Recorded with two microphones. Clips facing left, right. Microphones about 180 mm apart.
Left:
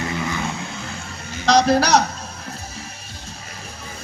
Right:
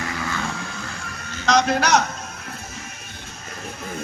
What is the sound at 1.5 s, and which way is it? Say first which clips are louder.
Speech: left 3 dB; 35° left (ahead or behind).